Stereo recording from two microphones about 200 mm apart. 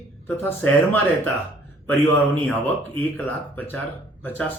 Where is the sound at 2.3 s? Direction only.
10° left (ahead or behind).